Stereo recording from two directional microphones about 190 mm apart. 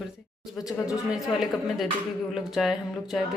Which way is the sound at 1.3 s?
Centre (ahead or behind).